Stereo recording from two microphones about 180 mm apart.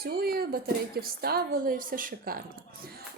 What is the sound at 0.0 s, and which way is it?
A woman's voice, 60° right (ahead or behind).